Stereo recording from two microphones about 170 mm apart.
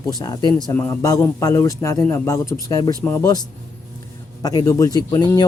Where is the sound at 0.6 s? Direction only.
15° left (ahead or behind).